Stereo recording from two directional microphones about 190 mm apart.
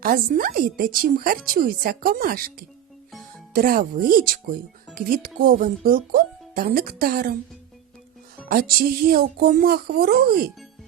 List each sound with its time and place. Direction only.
0.0 s speech: 50° right (ahead or behind)
8.4 s speech: 50° right (ahead or behind)